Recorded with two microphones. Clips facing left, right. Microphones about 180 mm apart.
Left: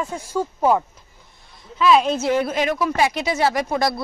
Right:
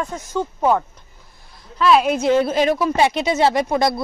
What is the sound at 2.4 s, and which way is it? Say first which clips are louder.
Speech: right 4 dB; 30° right (ahead or behind).